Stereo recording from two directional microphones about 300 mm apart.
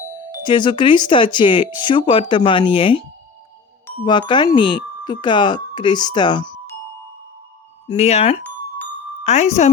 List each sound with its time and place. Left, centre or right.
0.3 s speech: centre
7.9 s speech: left